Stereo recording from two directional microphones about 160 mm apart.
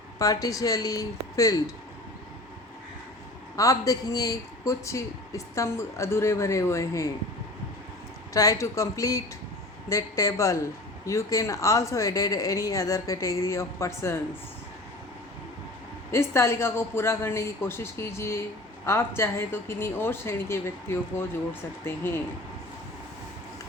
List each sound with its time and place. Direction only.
0.2 s a woman's voice: 20° left (ahead or behind)
3.5 s a woman's voice: 20° left (ahead or behind)
8.3 s a woman's voice: 20° left (ahead or behind)
16.1 s a woman's voice: 15° left (ahead or behind)